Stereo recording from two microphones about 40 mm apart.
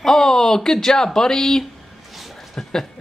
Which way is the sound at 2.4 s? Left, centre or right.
Centre.